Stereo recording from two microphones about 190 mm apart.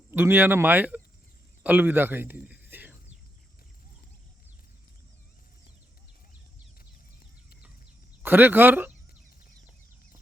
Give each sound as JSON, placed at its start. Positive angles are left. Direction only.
{"t": 0.1, "sound": "a man's voice", "side_deg": -10}
{"t": 8.2, "sound": "speech", "side_deg": -10}